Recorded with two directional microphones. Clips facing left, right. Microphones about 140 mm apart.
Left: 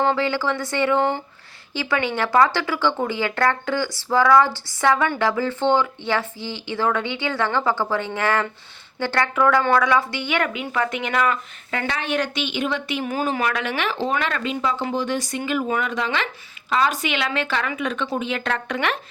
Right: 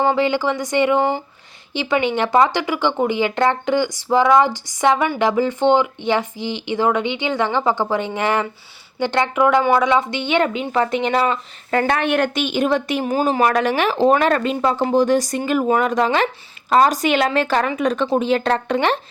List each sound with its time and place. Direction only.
0.0 s speech: 15° right (ahead or behind); by 11.9 s 40° right (ahead or behind)
11.9 s a woman's voice: 55° right (ahead or behind); by 18.9 s 30° right (ahead or behind)